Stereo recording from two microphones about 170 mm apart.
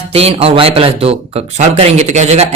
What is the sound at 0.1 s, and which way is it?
Speech, 35° right (ahead or behind).